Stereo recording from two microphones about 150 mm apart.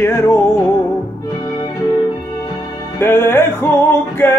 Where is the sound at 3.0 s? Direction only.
15° left (ahead or behind).